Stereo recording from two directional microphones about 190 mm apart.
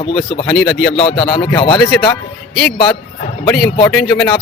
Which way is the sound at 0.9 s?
25° left (ahead or behind).